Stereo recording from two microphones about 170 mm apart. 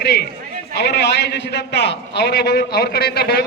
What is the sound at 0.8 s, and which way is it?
A man's voice, 85° left.